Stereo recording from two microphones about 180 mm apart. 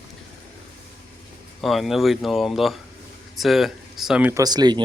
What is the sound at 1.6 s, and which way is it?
Speech, centre (ahead or behind).